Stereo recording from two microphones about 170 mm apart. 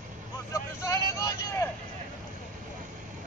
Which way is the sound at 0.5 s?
15° left (ahead or behind).